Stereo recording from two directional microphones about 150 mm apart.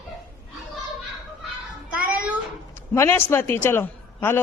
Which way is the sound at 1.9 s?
10° right (ahead or behind).